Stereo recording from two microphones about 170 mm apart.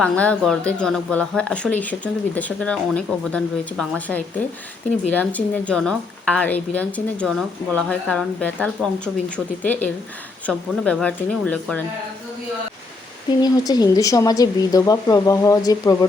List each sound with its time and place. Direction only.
0.0 s speech: 5° left (ahead or behind)
13.4 s speech: 25° left (ahead or behind)